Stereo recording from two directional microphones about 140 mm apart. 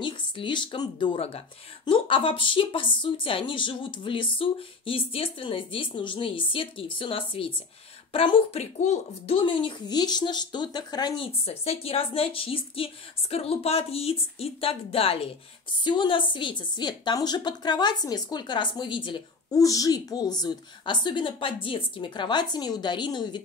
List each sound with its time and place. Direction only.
0.0 s a woman's voice: 35° left (ahead or behind); by 9.4 s 50° left (ahead or behind)
9.4 s a woman's voice: 35° left (ahead or behind)
11.4 s a woman's voice: 45° left (ahead or behind)